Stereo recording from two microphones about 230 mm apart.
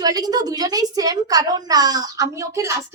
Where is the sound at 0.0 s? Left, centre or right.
Centre.